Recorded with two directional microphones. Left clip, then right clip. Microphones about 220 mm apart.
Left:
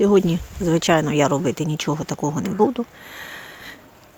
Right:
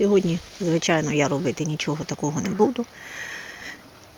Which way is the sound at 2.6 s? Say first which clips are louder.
Left 2 dB; 10° left (ahead or behind).